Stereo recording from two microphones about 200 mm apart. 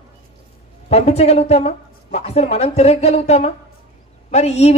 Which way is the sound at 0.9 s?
30° left (ahead or behind).